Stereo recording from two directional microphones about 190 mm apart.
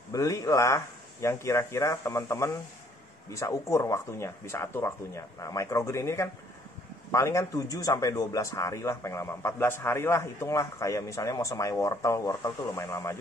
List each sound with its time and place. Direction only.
0.1 s speech: 15° left (ahead or behind)